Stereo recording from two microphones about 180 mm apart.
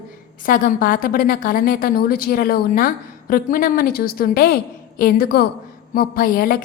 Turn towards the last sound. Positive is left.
turn(degrees=50)  # may be behind; listen again after turning